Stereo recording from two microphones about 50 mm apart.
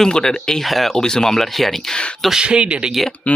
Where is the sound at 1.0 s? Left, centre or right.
Centre.